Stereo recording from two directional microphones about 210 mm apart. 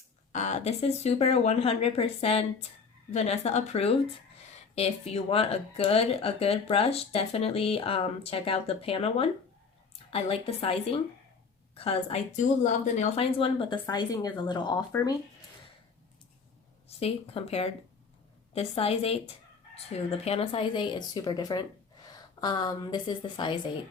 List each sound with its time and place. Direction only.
0.3 s speech: 35° left (ahead or behind)
17.0 s speech: 30° left (ahead or behind)